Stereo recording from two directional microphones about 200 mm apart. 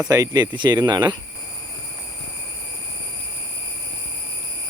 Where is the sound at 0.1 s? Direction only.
20° right (ahead or behind).